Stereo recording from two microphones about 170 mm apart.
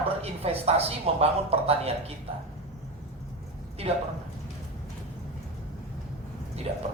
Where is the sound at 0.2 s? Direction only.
35° right (ahead or behind).